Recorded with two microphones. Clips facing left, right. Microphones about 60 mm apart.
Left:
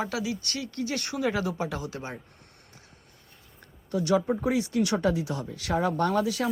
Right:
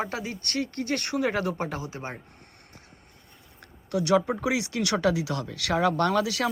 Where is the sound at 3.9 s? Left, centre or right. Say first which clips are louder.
Right 1 dB; right.